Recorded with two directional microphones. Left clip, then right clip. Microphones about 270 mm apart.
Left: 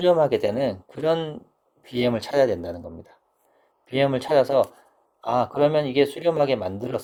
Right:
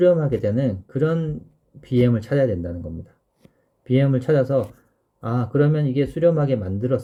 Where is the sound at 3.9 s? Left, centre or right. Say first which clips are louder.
Even; centre.